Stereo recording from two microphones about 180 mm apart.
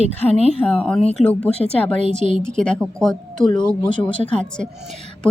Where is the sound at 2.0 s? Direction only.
40° right (ahead or behind).